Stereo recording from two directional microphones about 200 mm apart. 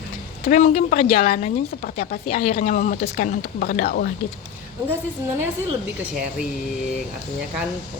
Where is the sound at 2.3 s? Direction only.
35° left (ahead or behind).